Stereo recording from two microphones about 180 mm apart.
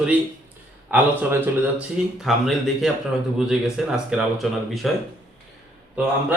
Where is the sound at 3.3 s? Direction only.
5° right (ahead or behind).